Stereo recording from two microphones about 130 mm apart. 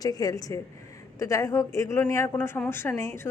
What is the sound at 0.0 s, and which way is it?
Speech, 30° left (ahead or behind).